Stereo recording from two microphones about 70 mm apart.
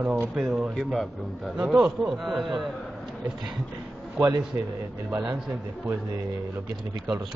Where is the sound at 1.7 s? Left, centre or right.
Centre.